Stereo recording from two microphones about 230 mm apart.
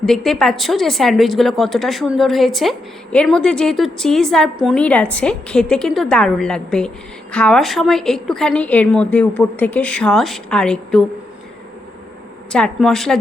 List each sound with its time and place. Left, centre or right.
0.0 s speech: centre
12.5 s speech: centre